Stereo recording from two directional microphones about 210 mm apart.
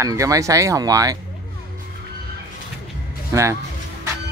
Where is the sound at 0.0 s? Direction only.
15° right (ahead or behind).